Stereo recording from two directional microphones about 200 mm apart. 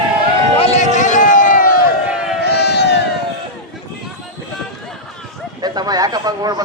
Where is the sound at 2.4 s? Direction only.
55° left (ahead or behind).